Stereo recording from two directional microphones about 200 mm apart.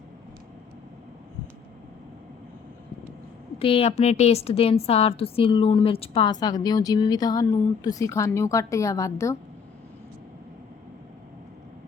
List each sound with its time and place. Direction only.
3.6 s a woman's voice: 30° left (ahead or behind)